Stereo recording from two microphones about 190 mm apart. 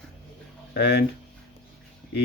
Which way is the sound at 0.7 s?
60° left (ahead or behind).